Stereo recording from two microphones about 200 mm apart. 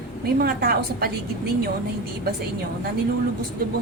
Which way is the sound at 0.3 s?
50° right (ahead or behind).